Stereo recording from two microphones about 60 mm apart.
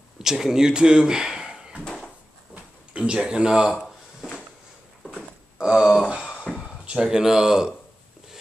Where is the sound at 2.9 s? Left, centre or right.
Centre.